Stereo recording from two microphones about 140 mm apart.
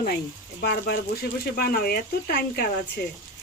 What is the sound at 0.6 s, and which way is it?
Speech, 90° left.